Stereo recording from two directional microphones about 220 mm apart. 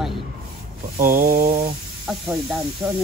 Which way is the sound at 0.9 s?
40° right (ahead or behind).